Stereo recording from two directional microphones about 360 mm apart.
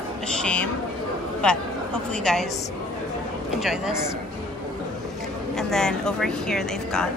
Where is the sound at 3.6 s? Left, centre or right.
Centre.